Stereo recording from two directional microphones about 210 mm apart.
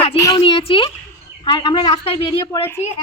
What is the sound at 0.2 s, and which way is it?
Speech, 15° left (ahead or behind).